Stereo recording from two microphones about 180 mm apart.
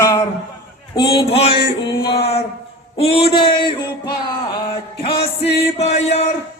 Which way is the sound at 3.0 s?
35° left (ahead or behind).